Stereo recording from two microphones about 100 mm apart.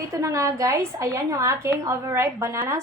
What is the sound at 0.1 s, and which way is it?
A woman's voice, 30° right (ahead or behind).